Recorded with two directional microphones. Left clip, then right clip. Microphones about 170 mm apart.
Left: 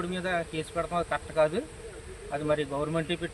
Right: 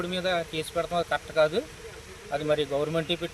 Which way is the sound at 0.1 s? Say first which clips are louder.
Right 5 dB; centre (ahead or behind).